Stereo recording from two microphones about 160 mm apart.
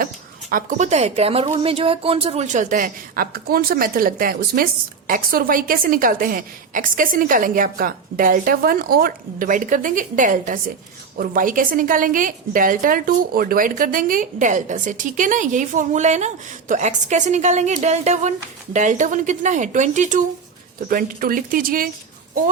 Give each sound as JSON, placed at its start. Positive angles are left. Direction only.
{"t": 0.5, "sound": "a woman's voice", "side_deg": -45}
{"t": 20.8, "sound": "a woman's voice", "side_deg": -60}